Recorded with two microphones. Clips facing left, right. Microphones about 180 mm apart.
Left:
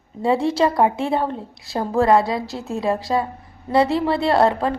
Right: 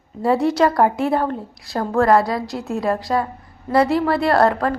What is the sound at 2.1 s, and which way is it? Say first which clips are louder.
Speech: right 1 dB; 25° left (ahead or behind).